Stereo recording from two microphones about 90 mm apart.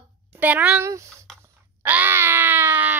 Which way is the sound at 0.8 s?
30° right (ahead or behind).